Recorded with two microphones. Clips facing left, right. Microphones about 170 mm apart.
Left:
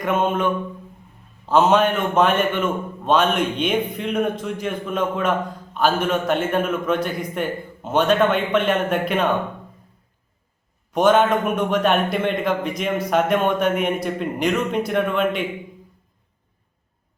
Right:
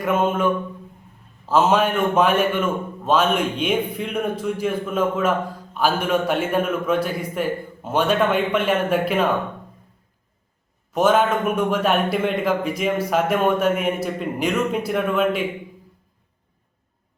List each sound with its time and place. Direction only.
0.0 s a man's voice: 5° right (ahead or behind)
10.9 s a man's voice: 5° right (ahead or behind)